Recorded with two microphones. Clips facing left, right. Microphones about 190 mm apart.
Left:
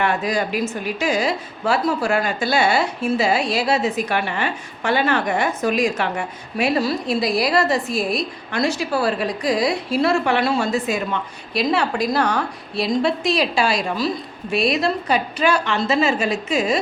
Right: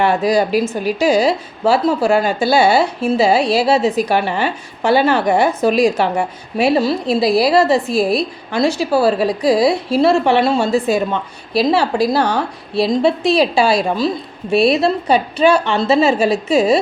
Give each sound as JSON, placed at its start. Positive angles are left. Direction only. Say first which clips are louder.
{"t": 0.0, "sound": "a woman's voice", "louder": "right 7 dB", "side_deg": -35}